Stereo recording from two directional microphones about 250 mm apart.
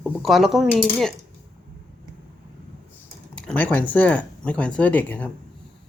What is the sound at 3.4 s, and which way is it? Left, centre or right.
Speech, centre.